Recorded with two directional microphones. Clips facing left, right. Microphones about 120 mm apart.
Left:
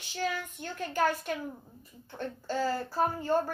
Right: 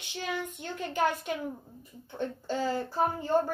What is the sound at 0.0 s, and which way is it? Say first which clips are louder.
A woman's voice: left 1 dB; 20° right (ahead or behind).